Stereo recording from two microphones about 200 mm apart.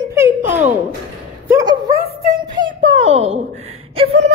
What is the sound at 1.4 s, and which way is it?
Speech, 15° right (ahead or behind).